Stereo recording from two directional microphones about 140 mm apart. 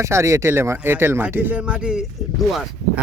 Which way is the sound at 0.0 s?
20° right (ahead or behind).